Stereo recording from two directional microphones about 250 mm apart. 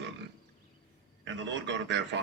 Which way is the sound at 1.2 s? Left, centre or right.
Right.